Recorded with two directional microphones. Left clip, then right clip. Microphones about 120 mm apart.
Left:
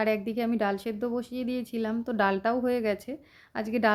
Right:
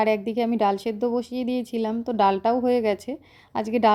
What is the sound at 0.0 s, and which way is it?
A woman's voice, 20° right (ahead or behind).